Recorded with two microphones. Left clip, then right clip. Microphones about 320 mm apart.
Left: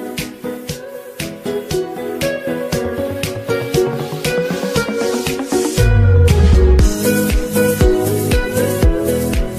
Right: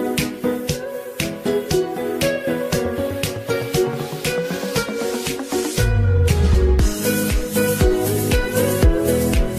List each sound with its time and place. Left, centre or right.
1.5 s music: centre
2.2 s music: centre
3.4 s music: left
5.5 s music: left
6.8 s music: left; by 9.4 s centre